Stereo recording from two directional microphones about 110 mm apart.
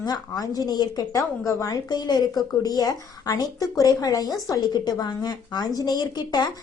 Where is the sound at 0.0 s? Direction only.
35° left (ahead or behind).